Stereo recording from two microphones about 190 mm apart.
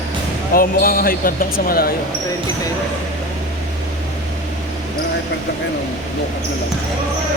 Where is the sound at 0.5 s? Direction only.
50° left (ahead or behind).